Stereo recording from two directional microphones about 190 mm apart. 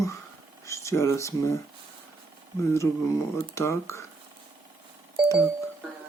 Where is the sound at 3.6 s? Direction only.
15° left (ahead or behind).